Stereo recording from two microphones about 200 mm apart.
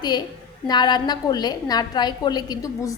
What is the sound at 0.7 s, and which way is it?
A woman's voice, 20° left (ahead or behind).